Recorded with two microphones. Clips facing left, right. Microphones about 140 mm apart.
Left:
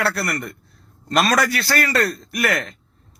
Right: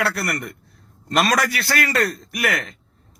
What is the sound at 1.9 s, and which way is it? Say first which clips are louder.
Speech: left 1 dB; 10° right (ahead or behind).